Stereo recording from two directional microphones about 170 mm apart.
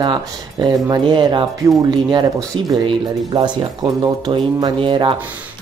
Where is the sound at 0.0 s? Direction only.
25° right (ahead or behind).